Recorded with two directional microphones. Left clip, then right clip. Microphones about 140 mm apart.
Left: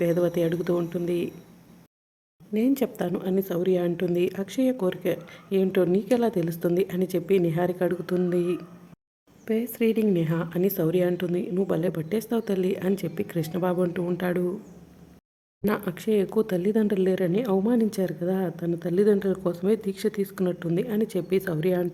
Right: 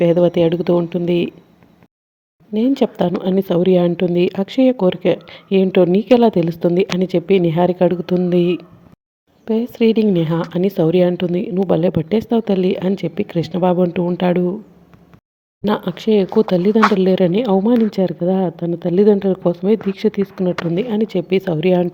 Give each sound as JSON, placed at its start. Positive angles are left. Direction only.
{"t": 0.0, "sound": "speech", "side_deg": -25}
{"t": 2.5, "sound": "a woman's voice", "side_deg": -20}
{"t": 9.4, "sound": "speech", "side_deg": -20}
{"t": 15.6, "sound": "speech", "side_deg": -25}